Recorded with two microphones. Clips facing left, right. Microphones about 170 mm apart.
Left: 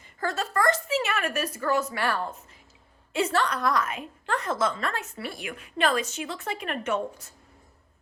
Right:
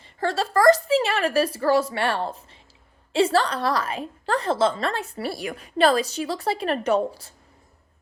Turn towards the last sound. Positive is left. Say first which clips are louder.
# right 7 dB
turn(degrees=-30)  # may be behind; listen again after turning